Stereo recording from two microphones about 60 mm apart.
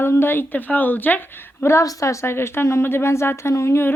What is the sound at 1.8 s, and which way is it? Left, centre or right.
A woman's voice, left.